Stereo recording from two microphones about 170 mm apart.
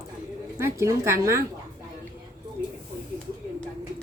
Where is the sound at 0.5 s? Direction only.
15° right (ahead or behind).